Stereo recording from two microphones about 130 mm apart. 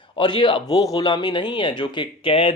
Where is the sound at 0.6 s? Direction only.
30° left (ahead or behind).